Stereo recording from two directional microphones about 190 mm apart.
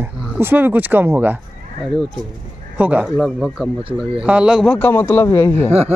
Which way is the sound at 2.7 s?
10° right (ahead or behind).